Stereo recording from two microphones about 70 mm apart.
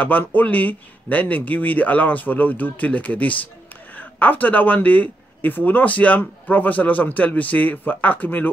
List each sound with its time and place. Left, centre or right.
0.0 s speech: left